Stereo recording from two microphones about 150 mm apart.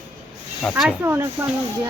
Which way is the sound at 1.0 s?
15° right (ahead or behind).